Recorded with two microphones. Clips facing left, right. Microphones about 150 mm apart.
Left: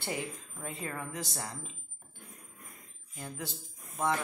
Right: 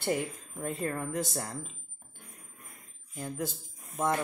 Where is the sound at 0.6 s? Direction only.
50° right (ahead or behind).